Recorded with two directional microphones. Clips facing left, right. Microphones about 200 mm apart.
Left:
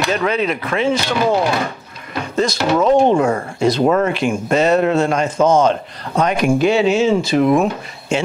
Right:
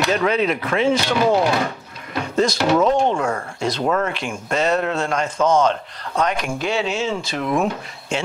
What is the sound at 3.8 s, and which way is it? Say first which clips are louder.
Speech: left 4 dB; 20° left (ahead or behind).